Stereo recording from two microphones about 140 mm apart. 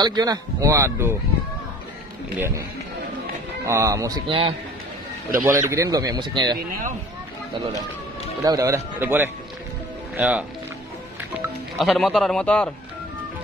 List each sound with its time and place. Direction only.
0.0 s speech: 30° right (ahead or behind)
2.3 s speech: 15° right (ahead or behind)
3.6 s speech: 20° right (ahead or behind)
4.3 s a man's voice: 40° right (ahead or behind)
5.4 s speech: 20° right (ahead or behind)
8.5 s speech: 20° right (ahead or behind)
11.8 s a man's voice: centre (ahead or behind)